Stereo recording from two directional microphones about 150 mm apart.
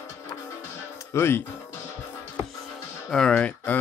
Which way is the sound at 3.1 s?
5° left (ahead or behind).